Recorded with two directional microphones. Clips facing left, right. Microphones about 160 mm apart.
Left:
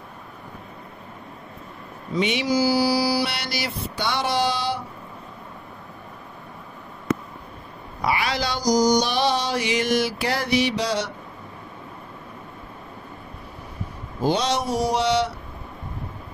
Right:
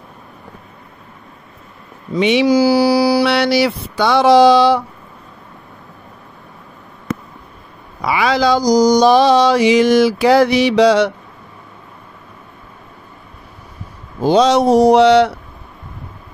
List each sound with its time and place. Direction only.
2.1 s mantra: 85° right
8.6 s mantra: 90° right; by 11.1 s 75° right (ahead or behind)
14.2 s a sound: 90° right; by 15.3 s 65° right (ahead or behind)